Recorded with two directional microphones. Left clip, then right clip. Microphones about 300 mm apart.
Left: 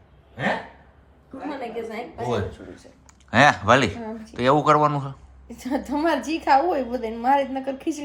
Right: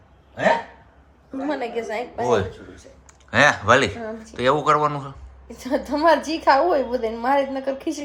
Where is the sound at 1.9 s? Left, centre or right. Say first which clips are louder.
Right 8 dB; right.